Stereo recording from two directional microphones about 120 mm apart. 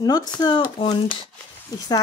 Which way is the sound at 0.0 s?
35° left (ahead or behind).